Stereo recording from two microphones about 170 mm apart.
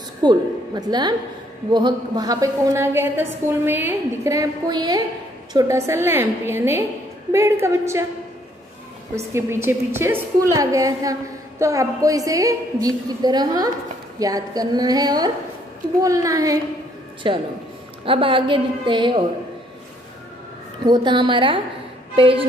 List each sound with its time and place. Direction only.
0.2 s a woman's voice: 25° right (ahead or behind)
9.1 s a woman's voice: 15° right (ahead or behind)
17.2 s a woman's voice: 30° right (ahead or behind)
20.8 s a woman's voice: 25° right (ahead or behind)